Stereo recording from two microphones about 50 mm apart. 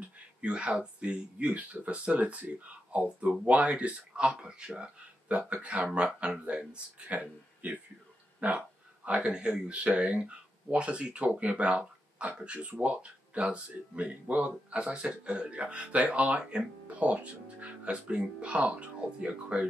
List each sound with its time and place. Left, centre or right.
0.4 s speech: right
11.8 s a sound: right
12.4 s speech: right